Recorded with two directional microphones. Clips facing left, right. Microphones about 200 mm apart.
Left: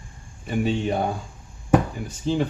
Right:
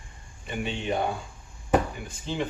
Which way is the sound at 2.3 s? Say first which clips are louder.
Left 9 dB; 40° left (ahead or behind).